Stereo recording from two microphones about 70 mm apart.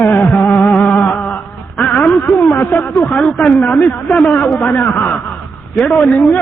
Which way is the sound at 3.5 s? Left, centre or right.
Left.